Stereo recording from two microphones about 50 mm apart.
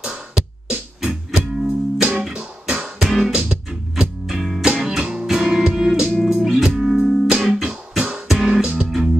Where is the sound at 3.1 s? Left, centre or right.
Centre.